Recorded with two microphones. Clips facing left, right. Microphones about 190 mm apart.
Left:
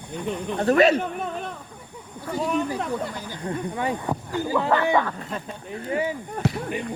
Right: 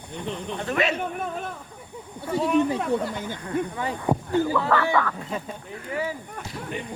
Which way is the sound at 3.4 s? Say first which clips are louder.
Left 2 dB; 20° left (ahead or behind).